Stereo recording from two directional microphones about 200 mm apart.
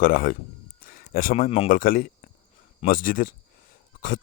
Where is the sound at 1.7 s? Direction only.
40° left (ahead or behind).